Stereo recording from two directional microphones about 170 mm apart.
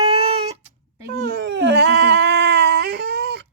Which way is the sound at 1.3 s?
80° right.